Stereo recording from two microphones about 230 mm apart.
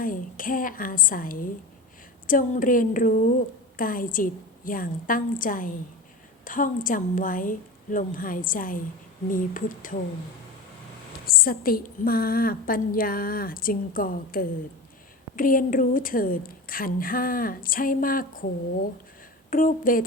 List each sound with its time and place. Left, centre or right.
0.0 s a woman's voice: left
11.3 s a woman's voice: left